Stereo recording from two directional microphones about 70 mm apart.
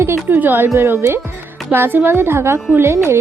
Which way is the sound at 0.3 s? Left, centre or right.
Right.